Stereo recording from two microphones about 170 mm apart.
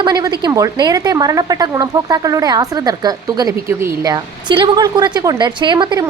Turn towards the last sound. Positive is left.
turn(degrees=-25)  # may be behind; listen again after turning